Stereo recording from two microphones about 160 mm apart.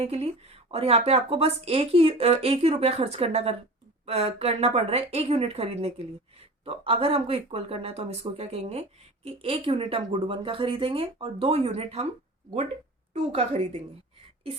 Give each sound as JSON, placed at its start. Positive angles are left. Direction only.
{"t": 0.0, "sound": "a woman's voice", "side_deg": -40}
{"t": 13.3, "sound": "a woman's voice", "side_deg": -40}